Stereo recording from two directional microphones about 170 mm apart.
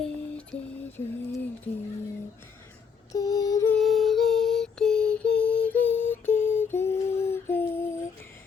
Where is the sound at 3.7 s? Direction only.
Centre (ahead or behind).